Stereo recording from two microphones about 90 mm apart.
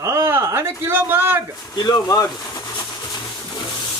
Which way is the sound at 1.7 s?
45° left (ahead or behind).